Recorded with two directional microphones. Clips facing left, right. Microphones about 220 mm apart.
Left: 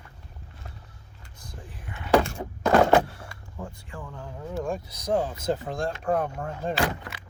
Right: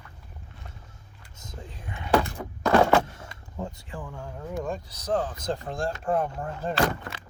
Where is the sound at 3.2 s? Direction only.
25° right (ahead or behind).